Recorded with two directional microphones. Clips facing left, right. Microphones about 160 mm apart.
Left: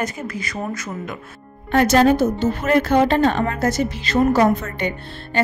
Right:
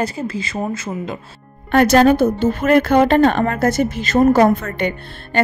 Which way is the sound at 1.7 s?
65° right (ahead or behind).